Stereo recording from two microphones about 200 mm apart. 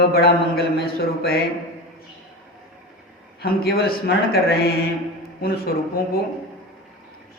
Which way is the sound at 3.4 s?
50° left (ahead or behind).